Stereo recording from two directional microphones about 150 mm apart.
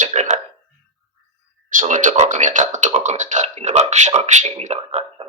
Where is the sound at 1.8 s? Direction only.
60° right (ahead or behind).